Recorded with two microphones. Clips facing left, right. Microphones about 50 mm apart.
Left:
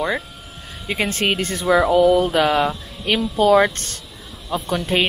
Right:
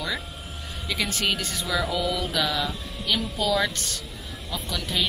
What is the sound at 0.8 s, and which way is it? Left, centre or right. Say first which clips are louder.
Speech: left 6 dB; left.